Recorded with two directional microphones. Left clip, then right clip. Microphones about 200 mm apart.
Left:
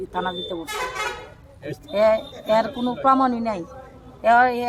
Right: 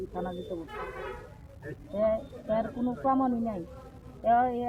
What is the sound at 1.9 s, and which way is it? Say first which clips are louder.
A woman's voice: left 10 dB; 45° left (ahead or behind).